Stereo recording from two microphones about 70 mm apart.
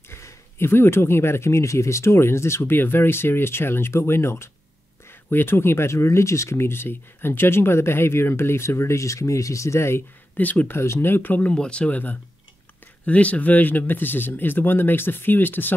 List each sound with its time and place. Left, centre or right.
0.1 s speech: left
10.3 s speech: left
10.8 s speech: left
11.5 s speech: centre